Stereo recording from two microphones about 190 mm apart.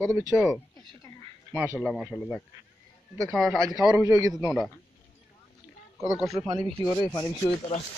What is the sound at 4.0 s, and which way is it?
Speech, 20° right (ahead or behind).